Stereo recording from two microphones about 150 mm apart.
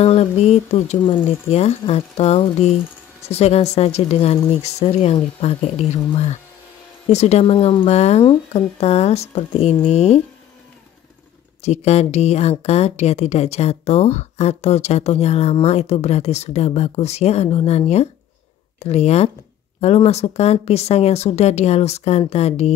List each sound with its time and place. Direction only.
0.0 s a woman's voice: 45° left (ahead or behind)
7.1 s a woman's voice: 45° left (ahead or behind)
11.6 s a woman's voice: 45° left (ahead or behind)